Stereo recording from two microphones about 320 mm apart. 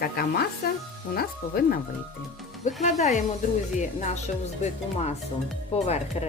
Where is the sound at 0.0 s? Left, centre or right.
Left.